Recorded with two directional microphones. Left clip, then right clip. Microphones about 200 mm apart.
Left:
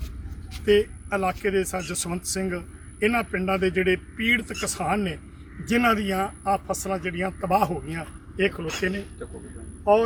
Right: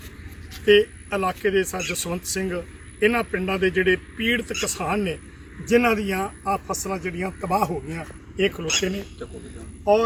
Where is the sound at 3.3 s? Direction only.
35° left (ahead or behind).